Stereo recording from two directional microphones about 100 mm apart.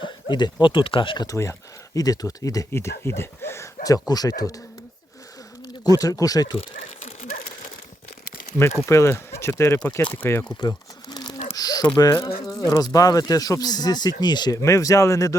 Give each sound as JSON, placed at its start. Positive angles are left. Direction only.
{"t": 0.0, "sound": "speech", "side_deg": 50}
{"t": 1.3, "sound": "speech", "side_deg": 30}
{"t": 2.7, "sound": "speech", "side_deg": 25}
{"t": 5.6, "sound": "speech", "side_deg": 40}
{"t": 8.9, "sound": "speech", "side_deg": 30}
{"t": 10.6, "sound": "crumpling", "side_deg": 40}
{"t": 11.5, "sound": "speech", "side_deg": 40}
{"t": 14.5, "sound": "speech", "side_deg": 30}